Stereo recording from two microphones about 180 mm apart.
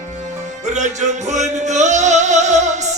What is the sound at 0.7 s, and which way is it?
Music, 40° right (ahead or behind).